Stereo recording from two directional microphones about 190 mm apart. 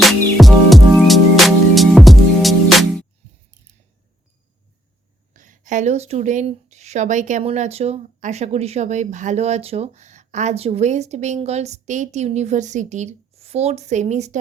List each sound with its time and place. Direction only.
0.0 s music: centre (ahead or behind)
5.3 s speech: 45° right (ahead or behind)